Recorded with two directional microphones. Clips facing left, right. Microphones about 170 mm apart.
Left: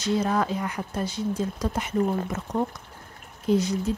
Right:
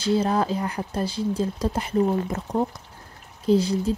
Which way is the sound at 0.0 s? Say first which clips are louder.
Right 2 dB; 30° right (ahead or behind).